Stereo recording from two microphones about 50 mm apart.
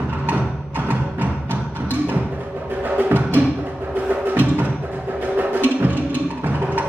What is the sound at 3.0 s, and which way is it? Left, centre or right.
Music, right.